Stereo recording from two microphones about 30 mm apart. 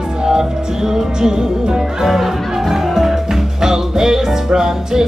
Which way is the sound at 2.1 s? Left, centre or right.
Centre.